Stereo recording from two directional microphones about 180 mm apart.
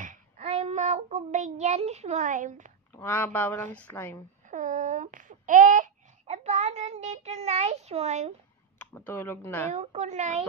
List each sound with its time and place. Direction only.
0.0 s child singing: 40° right (ahead or behind)
2.9 s speech: 10° left (ahead or behind)
4.5 s a sound: 45° right (ahead or behind)
8.9 s speech: 10° left (ahead or behind)
9.7 s a woman's voice: 40° right (ahead or behind)